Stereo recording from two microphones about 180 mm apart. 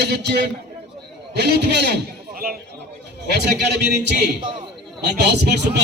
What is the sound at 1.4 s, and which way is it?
A man's voice, 65° right (ahead or behind).